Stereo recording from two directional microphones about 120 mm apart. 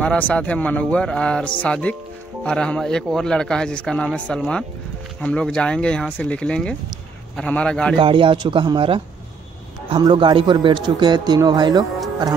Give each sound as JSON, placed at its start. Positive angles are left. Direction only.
{"t": 0.0, "sound": "speech", "side_deg": 10}
{"t": 8.0, "sound": "a man's voice", "side_deg": -45}